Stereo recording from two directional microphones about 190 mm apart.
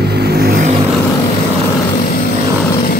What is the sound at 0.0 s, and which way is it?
Vehicle, 60° right (ahead or behind).